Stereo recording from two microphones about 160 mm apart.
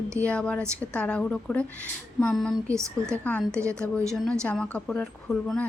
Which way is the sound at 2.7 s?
20° right (ahead or behind).